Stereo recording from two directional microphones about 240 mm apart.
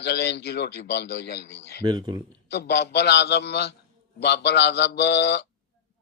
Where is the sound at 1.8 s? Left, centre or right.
Centre.